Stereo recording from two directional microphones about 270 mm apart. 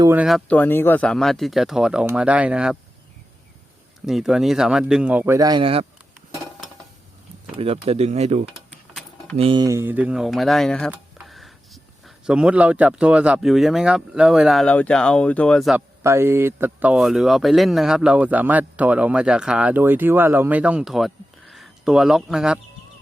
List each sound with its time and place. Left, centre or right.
0.0 s speech: centre
4.0 s speech: centre
7.5 s speech: right; by 22.6 s centre